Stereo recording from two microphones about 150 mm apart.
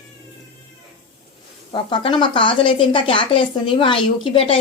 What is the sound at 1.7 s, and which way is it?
A woman's voice, 35° left (ahead or behind).